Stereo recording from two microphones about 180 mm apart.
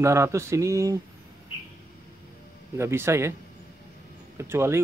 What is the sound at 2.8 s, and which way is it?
Speech, 15° right (ahead or behind).